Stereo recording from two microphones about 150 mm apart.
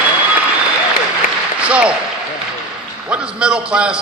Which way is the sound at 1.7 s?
5° right (ahead or behind).